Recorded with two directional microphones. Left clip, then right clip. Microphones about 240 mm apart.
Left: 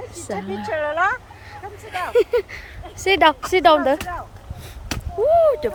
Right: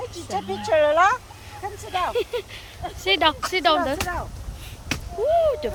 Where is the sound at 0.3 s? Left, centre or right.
Right.